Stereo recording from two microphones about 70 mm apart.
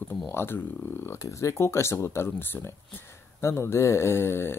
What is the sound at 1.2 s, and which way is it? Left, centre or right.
Speech, left.